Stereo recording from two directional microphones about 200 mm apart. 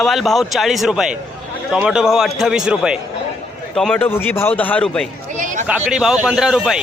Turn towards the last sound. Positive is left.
turn(degrees=-5)  # may be behind; listen again after turning